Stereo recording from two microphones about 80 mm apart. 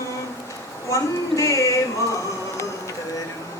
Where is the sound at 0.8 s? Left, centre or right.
Left.